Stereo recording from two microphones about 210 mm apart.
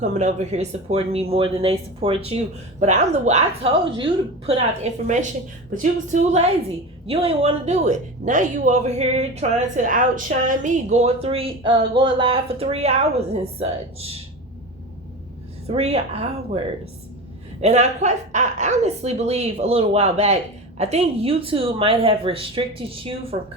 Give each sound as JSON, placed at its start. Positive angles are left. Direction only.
{"t": 0.0, "sound": "a woman's voice", "side_deg": -35}
{"t": 15.6, "sound": "a woman's voice", "side_deg": -30}
{"t": 17.6, "sound": "a woman's voice", "side_deg": -30}